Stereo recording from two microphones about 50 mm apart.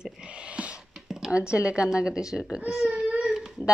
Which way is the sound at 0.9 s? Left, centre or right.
Centre.